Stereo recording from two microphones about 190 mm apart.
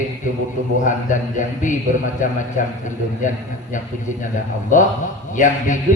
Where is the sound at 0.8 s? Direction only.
40° left (ahead or behind).